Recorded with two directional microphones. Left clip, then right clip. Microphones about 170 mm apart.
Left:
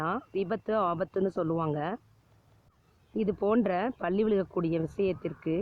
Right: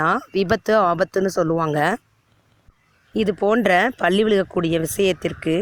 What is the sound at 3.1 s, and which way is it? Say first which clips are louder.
A woman's voice: right 9 dB; 35° right (ahead or behind).